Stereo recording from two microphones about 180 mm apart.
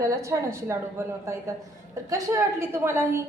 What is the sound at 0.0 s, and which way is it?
A woman's voice, 15° right (ahead or behind).